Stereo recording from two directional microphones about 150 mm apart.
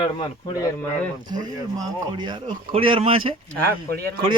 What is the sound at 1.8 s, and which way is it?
Speech, 30° right (ahead or behind).